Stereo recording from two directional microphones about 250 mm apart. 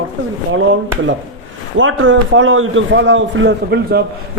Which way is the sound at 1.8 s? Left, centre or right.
Right.